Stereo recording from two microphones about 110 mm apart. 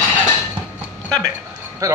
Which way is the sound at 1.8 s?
30° right (ahead or behind).